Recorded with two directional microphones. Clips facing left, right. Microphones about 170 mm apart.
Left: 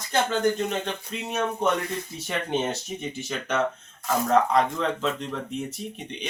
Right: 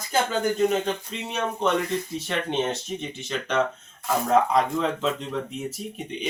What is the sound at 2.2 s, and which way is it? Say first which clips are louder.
Speech: left 1 dB; 10° left (ahead or behind).